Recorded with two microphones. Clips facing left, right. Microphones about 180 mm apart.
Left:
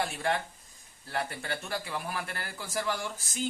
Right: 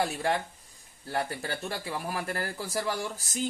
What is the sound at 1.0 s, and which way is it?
Speech, 35° right (ahead or behind).